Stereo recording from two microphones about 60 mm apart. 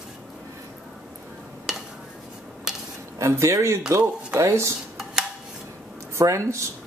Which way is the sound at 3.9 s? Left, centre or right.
Right.